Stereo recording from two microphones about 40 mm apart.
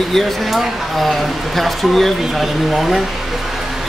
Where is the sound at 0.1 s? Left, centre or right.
Centre.